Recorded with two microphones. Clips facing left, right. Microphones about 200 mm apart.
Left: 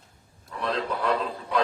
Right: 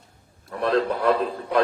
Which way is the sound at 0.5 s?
55° right (ahead or behind).